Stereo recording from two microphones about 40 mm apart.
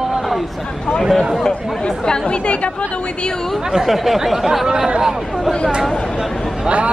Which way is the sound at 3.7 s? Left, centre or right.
Centre.